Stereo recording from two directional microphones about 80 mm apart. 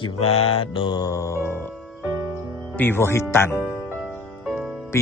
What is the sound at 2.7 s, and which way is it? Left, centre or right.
Speech, left.